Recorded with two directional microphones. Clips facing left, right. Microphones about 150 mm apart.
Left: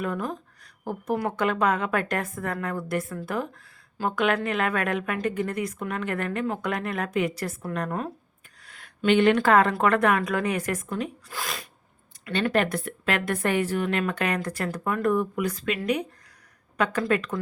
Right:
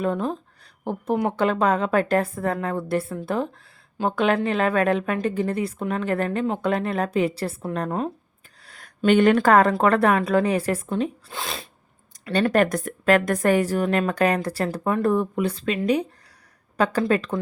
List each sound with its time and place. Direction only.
0.0 s a woman's voice: 25° right (ahead or behind)
12.2 s a woman's voice: 40° right (ahead or behind)